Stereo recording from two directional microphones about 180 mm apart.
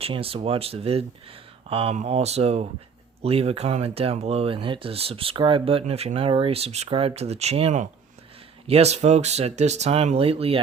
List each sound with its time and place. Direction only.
0.0 s speech: 30° right (ahead or behind)